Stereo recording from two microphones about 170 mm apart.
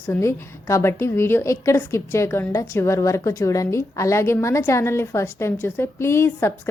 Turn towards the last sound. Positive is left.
turn(degrees=15)  # may be behind; listen again after turning